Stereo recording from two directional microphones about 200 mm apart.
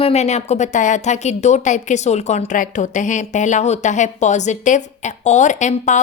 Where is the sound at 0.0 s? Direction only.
30° left (ahead or behind).